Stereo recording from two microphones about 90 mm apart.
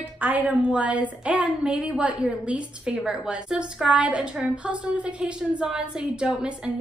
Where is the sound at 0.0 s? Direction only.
20° right (ahead or behind).